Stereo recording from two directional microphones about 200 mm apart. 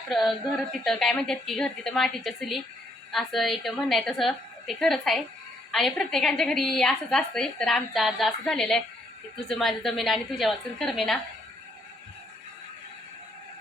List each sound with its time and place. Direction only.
0.1 s a woman's voice: centre (ahead or behind)